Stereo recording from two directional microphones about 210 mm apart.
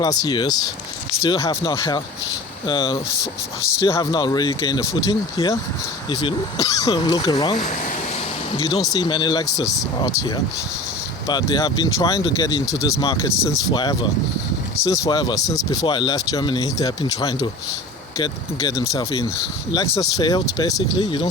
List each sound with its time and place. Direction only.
0.0 s speech: 20° left (ahead or behind)